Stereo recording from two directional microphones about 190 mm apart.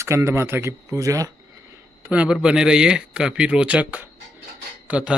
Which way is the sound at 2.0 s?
5° right (ahead or behind).